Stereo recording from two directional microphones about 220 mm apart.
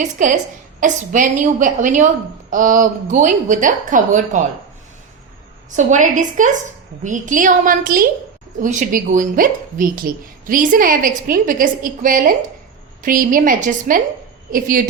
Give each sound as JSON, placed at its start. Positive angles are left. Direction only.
{"t": 0.0, "sound": "a woman's voice", "side_deg": -35}
{"t": 5.7, "sound": "a woman's voice", "side_deg": -35}